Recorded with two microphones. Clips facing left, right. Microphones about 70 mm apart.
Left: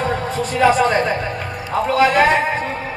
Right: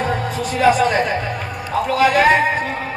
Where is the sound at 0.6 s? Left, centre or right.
Left.